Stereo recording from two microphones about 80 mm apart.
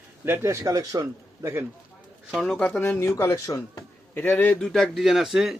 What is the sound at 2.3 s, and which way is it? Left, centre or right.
Speech, centre.